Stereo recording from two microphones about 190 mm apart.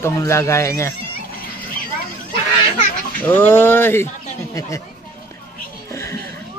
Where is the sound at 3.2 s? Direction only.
10° left (ahead or behind).